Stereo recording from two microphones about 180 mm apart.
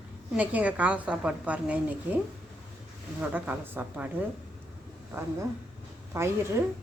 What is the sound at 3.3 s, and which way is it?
Speech, 10° right (ahead or behind).